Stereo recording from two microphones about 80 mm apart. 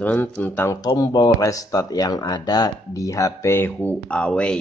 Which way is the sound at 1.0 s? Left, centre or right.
Left.